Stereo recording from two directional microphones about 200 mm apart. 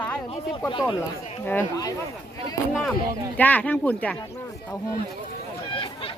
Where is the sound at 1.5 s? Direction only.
15° left (ahead or behind).